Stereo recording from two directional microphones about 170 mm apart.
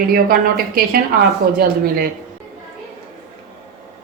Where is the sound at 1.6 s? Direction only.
60° right (ahead or behind).